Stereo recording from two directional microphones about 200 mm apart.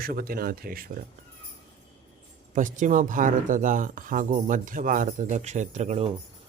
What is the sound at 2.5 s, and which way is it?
Speech, 40° right (ahead or behind).